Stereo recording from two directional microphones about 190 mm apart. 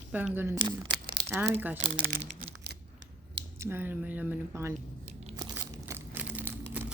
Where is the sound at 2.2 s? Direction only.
65° right (ahead or behind).